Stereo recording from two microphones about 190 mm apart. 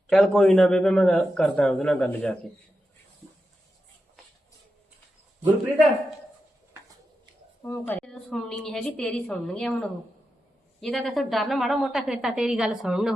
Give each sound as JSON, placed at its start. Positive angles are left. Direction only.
{"t": 0.1, "sound": "a woman's voice", "side_deg": 0}
{"t": 7.6, "sound": "a woman's voice", "side_deg": 10}